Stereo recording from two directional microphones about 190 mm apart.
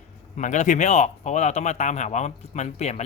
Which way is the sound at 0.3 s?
40° left (ahead or behind).